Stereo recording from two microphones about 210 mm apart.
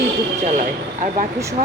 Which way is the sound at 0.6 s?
40° right (ahead or behind).